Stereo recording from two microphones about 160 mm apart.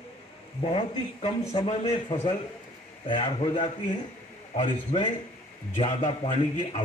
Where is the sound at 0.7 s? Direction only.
35° left (ahead or behind).